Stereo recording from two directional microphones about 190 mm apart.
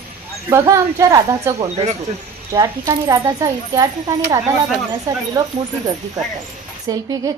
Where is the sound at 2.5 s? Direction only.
20° right (ahead or behind).